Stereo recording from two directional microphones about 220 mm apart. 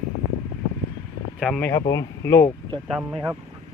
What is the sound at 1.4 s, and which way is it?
Speech, 5° left (ahead or behind).